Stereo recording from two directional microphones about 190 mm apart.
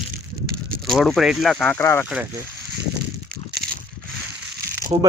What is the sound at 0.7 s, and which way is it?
Speech, centre (ahead or behind).